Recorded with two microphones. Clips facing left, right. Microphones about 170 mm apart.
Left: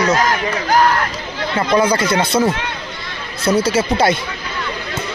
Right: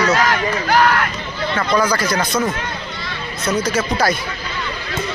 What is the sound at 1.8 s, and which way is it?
Speech, 25° left (ahead or behind).